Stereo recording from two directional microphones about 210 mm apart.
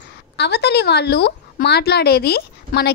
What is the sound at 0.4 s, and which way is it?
A woman's voice, 50° left (ahead or behind).